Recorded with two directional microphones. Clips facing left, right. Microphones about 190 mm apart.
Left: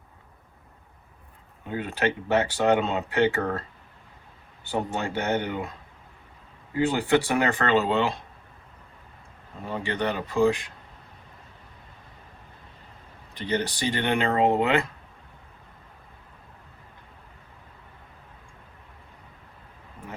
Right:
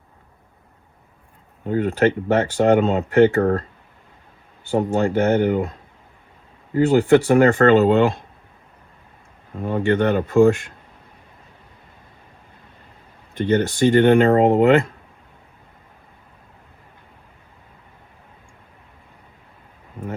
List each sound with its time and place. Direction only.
1.6 s speech: 45° right (ahead or behind)
4.9 s speech: 40° right (ahead or behind)
6.7 s speech: 50° right (ahead or behind)
9.6 s speech: 50° right (ahead or behind)
13.3 s speech: 50° right (ahead or behind)